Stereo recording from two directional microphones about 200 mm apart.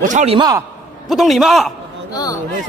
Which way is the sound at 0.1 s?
35° right (ahead or behind).